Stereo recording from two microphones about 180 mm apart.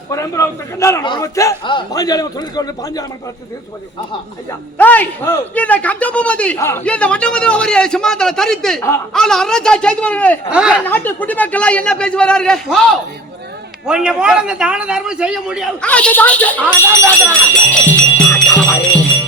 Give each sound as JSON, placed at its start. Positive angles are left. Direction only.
{"t": 0.1, "sound": "a man's voice", "side_deg": 15}
{"t": 4.8, "sound": "a man's voice", "side_deg": 10}
{"t": 10.5, "sound": "a man's voice", "side_deg": -5}
{"t": 10.8, "sound": "a man's voice", "side_deg": 10}
{"t": 17.7, "sound": "music", "side_deg": 10}